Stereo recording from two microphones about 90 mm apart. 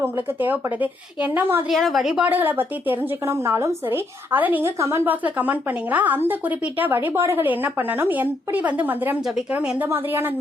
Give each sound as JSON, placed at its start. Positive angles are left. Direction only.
{"t": 0.0, "sound": "a woman's voice", "side_deg": -20}
{"t": 1.7, "sound": "a woman's voice", "side_deg": 0}
{"t": 2.2, "sound": "a woman's voice", "side_deg": -20}
{"t": 4.8, "sound": "speech", "side_deg": -30}
{"t": 5.0, "sound": "a woman's voice", "side_deg": -20}
{"t": 9.2, "sound": "a woman's voice", "side_deg": -5}
{"t": 9.6, "sound": "a woman's voice", "side_deg": -15}